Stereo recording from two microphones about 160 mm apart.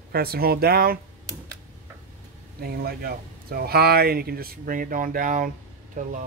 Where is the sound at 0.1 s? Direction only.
75° right (ahead or behind).